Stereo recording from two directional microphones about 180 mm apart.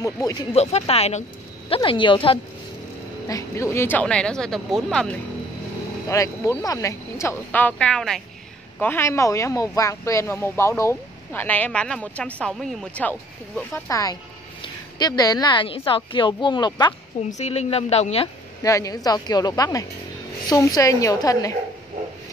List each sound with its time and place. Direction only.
0.0 s a woman's voice: 20° left (ahead or behind)
0.5 s a woman's voice: 35° left (ahead or behind)
3.3 s speech: 15° left (ahead or behind)
6.0 s a woman's voice: 20° left (ahead or behind)
17.3 s speech: 40° left (ahead or behind)
18.6 s a woman's voice: 20° left (ahead or behind)